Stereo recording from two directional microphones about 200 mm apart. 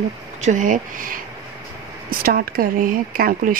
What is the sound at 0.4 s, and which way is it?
Speech, 40° right (ahead or behind).